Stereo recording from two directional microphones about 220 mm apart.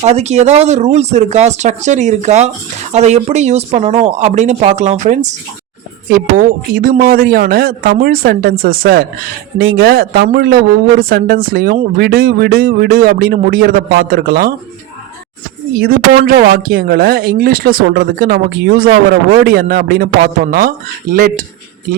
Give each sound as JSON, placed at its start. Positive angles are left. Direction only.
{"t": 0.0, "sound": "a man's voice", "side_deg": -30}
{"t": 15.8, "sound": "a man's voice", "side_deg": -40}